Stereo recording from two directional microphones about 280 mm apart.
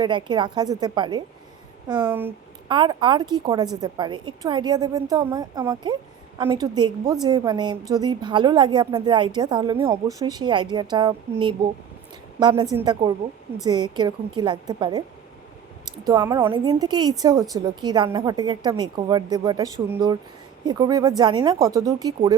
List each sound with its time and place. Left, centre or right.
0.0 s a woman's voice: centre
16.0 s a woman's voice: centre